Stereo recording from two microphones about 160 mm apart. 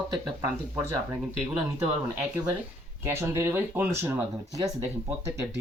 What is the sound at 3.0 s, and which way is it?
Speech, 15° right (ahead or behind).